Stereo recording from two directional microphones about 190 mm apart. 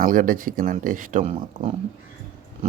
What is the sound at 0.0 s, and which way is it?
Speech, 45° right (ahead or behind).